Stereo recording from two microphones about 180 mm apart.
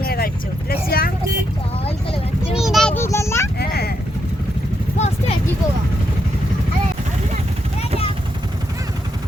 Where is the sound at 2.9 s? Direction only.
15° left (ahead or behind).